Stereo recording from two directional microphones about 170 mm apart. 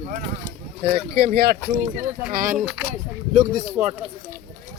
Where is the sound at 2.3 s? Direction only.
50° right (ahead or behind).